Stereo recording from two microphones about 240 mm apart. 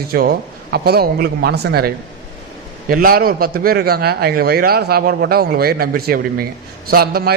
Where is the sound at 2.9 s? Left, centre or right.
Right.